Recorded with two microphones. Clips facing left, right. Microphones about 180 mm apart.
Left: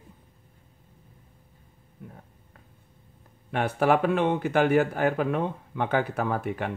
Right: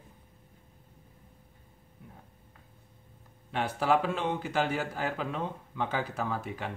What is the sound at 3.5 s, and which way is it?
Speech, 60° left (ahead or behind).